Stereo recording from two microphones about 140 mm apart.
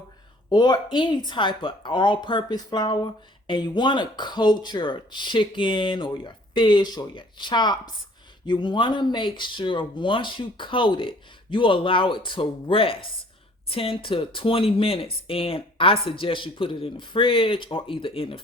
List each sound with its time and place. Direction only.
0.5 s speech: 30° left (ahead or behind)